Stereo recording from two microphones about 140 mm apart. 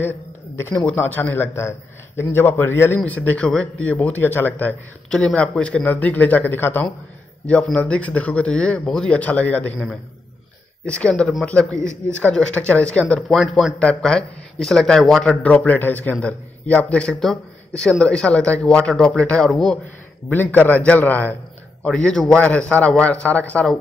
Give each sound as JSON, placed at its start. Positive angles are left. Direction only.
{"t": 0.6, "sound": "a man's voice", "side_deg": 15}